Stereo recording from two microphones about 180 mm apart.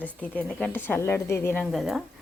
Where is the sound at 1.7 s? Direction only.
Centre (ahead or behind).